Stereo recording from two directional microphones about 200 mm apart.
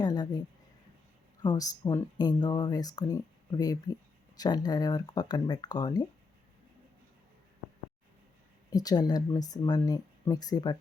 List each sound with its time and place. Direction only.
0.0 s a sound: 20° left (ahead or behind)
1.4 s speech: 20° left (ahead or behind)
8.7 s speech: 20° left (ahead or behind)